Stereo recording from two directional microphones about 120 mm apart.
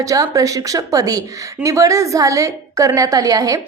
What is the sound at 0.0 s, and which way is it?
A woman's voice, 30° right (ahead or behind).